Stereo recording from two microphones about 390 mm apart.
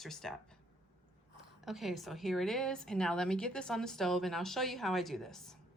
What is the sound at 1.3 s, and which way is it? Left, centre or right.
A woman's voice, centre.